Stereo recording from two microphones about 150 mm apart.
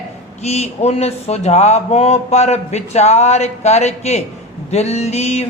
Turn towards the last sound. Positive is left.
turn(degrees=45)  # may be behind; listen again after turning